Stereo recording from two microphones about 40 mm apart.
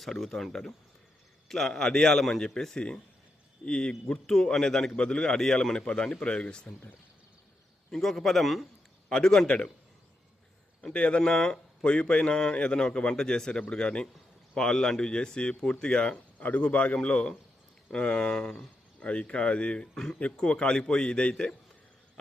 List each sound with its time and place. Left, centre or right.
0.0 s a man's voice: centre; by 6.7 s left
8.0 s a man's voice: centre
9.0 s speech: centre
10.9 s speech: left
11.2 s speech: centre
16.4 s speech: left
16.6 s speech: left
18.9 s speech: left